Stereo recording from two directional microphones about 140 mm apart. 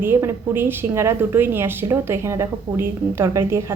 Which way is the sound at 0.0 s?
15° right (ahead or behind).